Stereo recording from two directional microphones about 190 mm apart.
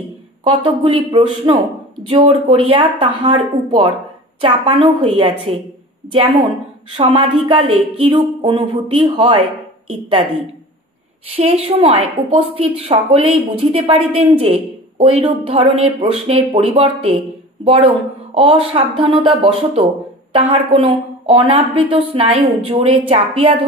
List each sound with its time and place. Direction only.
0.4 s a woman's voice: 25° right (ahead or behind)
7.0 s a woman's voice: 25° right (ahead or behind)